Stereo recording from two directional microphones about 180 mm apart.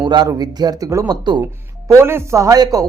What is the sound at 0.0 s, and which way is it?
A man's voice, 25° right (ahead or behind).